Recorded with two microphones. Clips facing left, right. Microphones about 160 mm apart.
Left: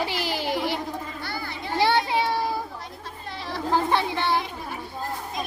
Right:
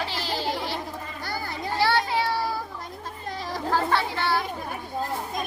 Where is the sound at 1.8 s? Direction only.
20° left (ahead or behind).